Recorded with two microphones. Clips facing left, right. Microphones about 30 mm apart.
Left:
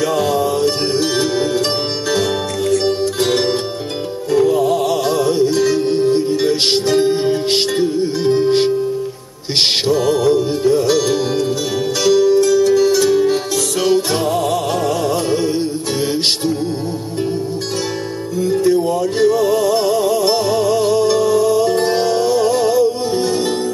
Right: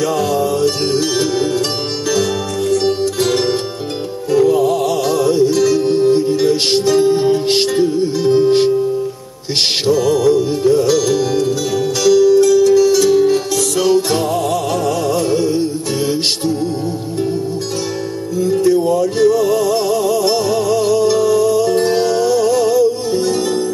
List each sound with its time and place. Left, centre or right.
0.0 s music: centre
2.0 s music: left
2.8 s zither: centre
4.3 s music: centre
4.8 s music: centre
9.8 s music: left
13.1 s music: centre
18.4 s music: centre